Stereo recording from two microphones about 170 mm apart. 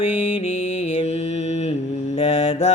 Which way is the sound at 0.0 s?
40° left (ahead or behind).